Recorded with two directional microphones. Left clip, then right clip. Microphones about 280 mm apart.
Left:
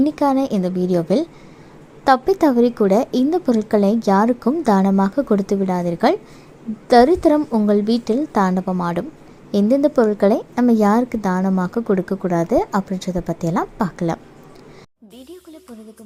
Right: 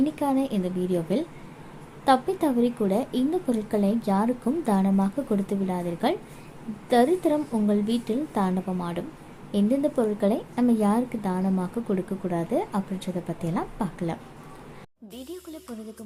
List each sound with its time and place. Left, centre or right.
0.0 s a woman's voice: left